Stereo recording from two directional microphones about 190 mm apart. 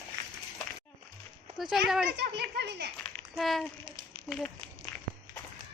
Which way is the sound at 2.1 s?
60° right (ahead or behind).